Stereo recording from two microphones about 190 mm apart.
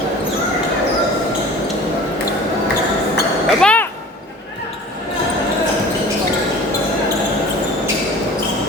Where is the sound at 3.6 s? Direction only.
5° left (ahead or behind).